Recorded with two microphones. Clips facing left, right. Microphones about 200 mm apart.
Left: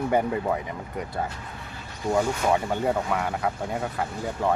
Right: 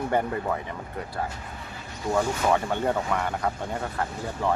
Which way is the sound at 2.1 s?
10° left (ahead or behind).